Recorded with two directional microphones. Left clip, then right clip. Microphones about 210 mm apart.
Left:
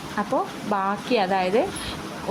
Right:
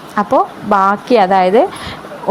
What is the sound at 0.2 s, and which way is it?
A woman's voice, 20° right (ahead or behind).